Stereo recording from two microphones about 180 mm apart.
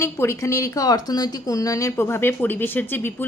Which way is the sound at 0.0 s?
15° left (ahead or behind).